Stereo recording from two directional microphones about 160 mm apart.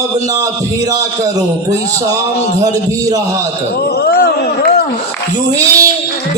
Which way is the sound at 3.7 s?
80° left.